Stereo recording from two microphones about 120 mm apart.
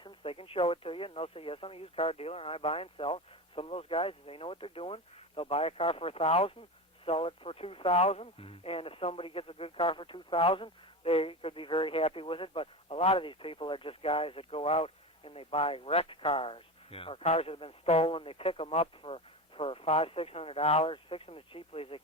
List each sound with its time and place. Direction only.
0.0 s speech: 50° left (ahead or behind)